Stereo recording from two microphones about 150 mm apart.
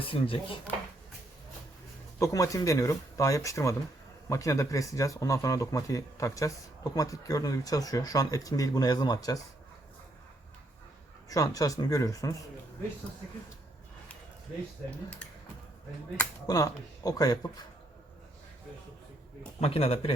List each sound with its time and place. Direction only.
0.0 s speech: 35° left (ahead or behind)
2.1 s speech: 20° left (ahead or behind)
11.3 s speech: 25° left (ahead or behind)
14.8 s speech: 5° left (ahead or behind)
16.5 s speech: 25° left (ahead or behind)
19.5 s speech: 40° left (ahead or behind)